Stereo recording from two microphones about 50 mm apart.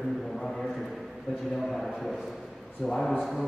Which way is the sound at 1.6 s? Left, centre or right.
Centre.